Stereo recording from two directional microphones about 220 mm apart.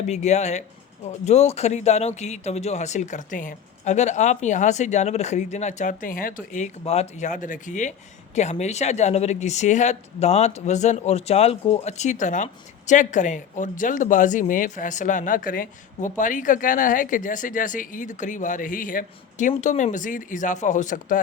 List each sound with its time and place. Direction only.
0.0 s speech: 30° left (ahead or behind)